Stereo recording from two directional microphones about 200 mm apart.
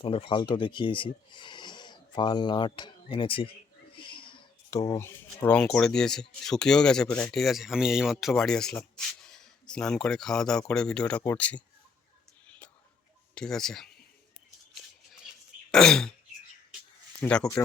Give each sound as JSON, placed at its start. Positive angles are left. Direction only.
{"t": 0.0, "sound": "speech", "side_deg": 25}
{"t": 13.3, "sound": "speech", "side_deg": 5}
{"t": 15.7, "sound": "speech", "side_deg": 5}
{"t": 17.2, "sound": "speech", "side_deg": 5}